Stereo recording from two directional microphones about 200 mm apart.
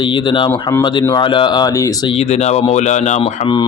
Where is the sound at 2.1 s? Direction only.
30° left (ahead or behind).